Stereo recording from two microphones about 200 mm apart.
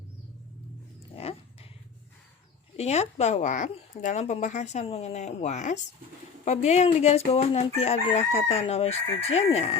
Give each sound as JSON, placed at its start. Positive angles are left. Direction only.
{"t": 1.1, "sound": "dog", "side_deg": 30}
{"t": 2.7, "sound": "speech", "side_deg": 35}